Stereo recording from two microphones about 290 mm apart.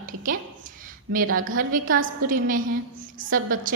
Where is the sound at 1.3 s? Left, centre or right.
Right.